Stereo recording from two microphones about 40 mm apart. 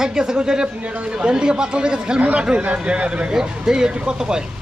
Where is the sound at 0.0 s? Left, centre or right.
Centre.